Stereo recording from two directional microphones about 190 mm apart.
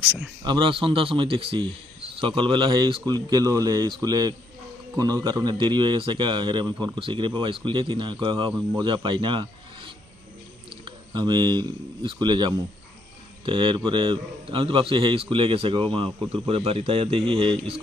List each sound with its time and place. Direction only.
0.4 s a man's voice: 25° right (ahead or behind)
10.9 s a man's voice: 25° right (ahead or behind)